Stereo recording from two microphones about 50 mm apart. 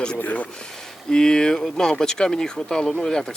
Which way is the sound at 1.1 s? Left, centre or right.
Centre.